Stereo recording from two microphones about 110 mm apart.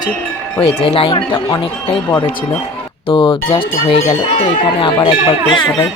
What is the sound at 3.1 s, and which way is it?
Speech, 50° left (ahead or behind).